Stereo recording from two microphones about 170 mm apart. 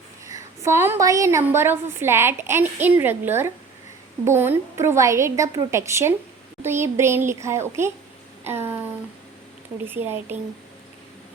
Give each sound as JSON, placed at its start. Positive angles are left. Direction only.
{"t": 0.6, "sound": "a woman's voice", "side_deg": -15}